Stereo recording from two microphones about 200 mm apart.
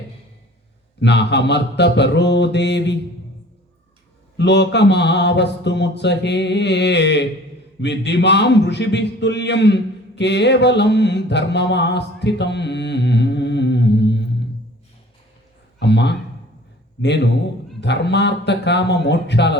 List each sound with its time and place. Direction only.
1.0 s speech: 60° left (ahead or behind)
4.4 s a man's voice: 60° left (ahead or behind)
15.8 s speech: 60° left (ahead or behind)